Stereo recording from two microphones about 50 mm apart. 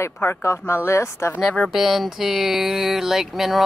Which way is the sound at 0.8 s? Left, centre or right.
Left.